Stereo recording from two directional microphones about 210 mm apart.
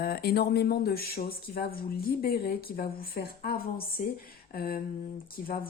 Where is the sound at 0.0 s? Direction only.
45° left (ahead or behind).